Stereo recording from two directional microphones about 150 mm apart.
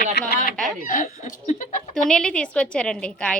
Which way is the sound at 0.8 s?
65° left (ahead or behind).